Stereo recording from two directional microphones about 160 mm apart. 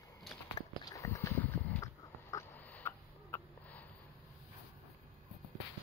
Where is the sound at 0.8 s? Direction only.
20° left (ahead or behind).